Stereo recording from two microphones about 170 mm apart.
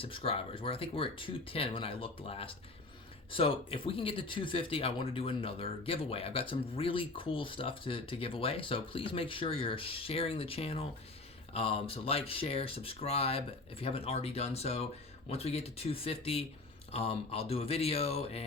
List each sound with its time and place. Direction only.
0.0 s speech: 35° left (ahead or behind)